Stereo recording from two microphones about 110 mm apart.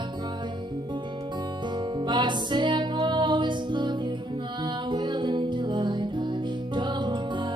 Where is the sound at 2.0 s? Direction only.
45° right (ahead or behind).